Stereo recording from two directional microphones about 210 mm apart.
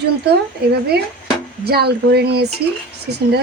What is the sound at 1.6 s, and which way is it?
Speech, 50° right (ahead or behind).